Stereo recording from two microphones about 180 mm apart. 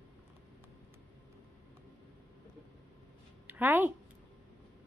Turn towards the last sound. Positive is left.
turn(degrees=-10)  # may be behind; listen again after turning